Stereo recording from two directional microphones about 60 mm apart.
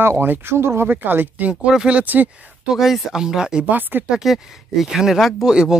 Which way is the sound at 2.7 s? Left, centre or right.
Centre.